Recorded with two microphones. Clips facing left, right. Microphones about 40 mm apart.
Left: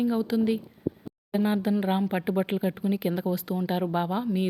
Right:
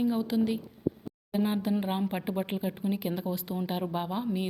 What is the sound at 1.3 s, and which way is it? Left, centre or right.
A woman's voice, centre.